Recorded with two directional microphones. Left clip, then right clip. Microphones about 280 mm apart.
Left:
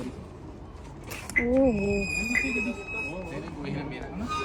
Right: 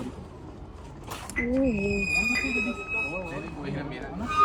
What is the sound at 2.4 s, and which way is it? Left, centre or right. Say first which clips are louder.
Speech: right 1 dB; right.